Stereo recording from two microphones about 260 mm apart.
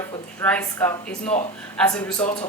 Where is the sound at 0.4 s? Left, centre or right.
Centre.